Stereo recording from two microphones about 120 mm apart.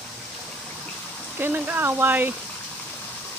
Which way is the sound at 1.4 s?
15° right (ahead or behind).